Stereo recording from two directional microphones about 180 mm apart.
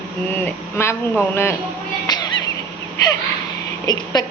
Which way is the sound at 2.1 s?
25° left (ahead or behind).